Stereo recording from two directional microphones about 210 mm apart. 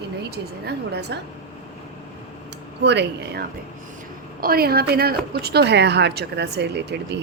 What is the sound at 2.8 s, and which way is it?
Speech, 55° right (ahead or behind).